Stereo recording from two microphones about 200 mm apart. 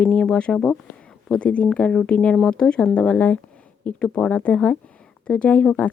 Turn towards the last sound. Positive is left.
turn(degrees=5)  # may be behind; listen again after turning